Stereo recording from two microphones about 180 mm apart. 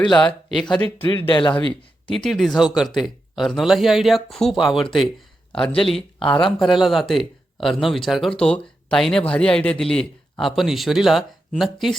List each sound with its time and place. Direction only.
0.0 s speech: 25° left (ahead or behind)
0.6 s speech: 5° left (ahead or behind)
0.9 s speech: 30° left (ahead or behind)
2.2 s speech: centre (ahead or behind)
6.0 s speech: 30° left (ahead or behind)
6.6 s speech: centre (ahead or behind)